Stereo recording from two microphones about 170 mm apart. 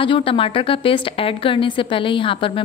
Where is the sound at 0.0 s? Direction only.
30° left (ahead or behind).